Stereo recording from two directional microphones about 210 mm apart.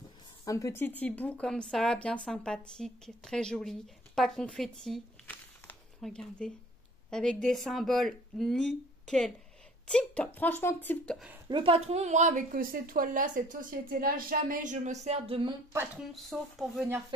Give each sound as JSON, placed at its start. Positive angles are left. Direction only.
{"t": 0.5, "sound": "speech", "side_deg": 15}
{"t": 11.4, "sound": "speech", "side_deg": -25}
{"t": 16.1, "sound": "speech", "side_deg": 0}